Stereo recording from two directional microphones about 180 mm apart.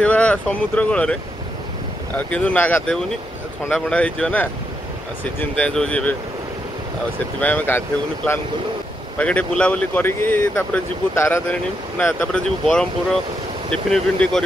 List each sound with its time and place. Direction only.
0.0 s speech: 5° left (ahead or behind)
2.1 s speech: 10° left (ahead or behind)
7.3 s speech: 10° left (ahead or behind)
9.2 s speech: 5° left (ahead or behind)